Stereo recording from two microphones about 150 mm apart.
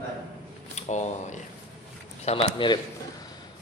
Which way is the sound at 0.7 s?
50° left (ahead or behind).